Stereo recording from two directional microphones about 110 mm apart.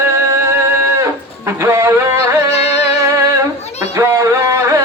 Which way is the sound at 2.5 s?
75° left (ahead or behind).